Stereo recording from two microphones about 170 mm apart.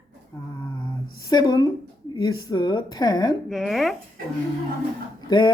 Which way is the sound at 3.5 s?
Centre (ahead or behind).